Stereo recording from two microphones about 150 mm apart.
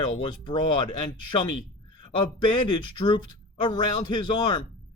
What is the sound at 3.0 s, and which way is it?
Speech, 30° left (ahead or behind).